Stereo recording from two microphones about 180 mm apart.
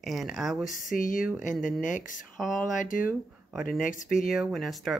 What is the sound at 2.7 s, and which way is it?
Speech, 45° left (ahead or behind).